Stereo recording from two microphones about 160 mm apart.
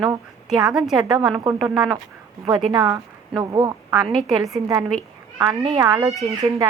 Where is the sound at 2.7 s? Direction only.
25° right (ahead or behind).